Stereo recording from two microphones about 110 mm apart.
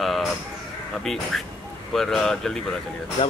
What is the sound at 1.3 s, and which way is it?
Speech, centre (ahead or behind).